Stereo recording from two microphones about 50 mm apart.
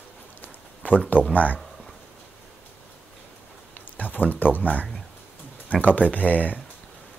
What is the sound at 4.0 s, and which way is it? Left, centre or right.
Speech, left.